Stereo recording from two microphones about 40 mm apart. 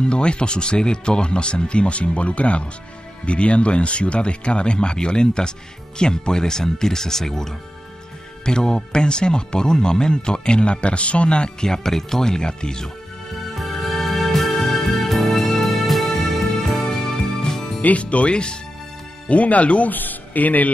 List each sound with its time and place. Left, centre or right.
0.0 s speech: left
13.6 s music: centre
17.0 s music: centre
17.8 s speech: left
19.2 s speech: left
19.9 s speech: left